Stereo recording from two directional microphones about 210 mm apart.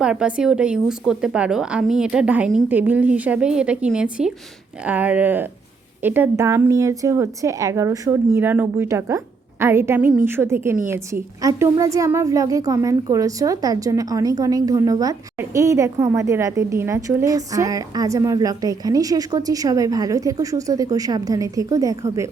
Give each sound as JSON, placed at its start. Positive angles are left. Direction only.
{"t": 0.0, "sound": "a woman's voice", "side_deg": -5}